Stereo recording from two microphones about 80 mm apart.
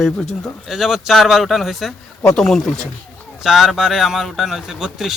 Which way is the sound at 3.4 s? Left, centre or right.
Centre.